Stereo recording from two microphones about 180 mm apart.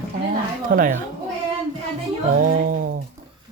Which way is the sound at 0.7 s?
50° right (ahead or behind).